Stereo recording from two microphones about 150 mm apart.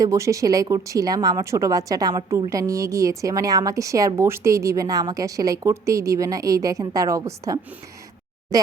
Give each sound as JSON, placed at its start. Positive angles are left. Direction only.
{"t": 0.0, "sound": "a woman's voice", "side_deg": -20}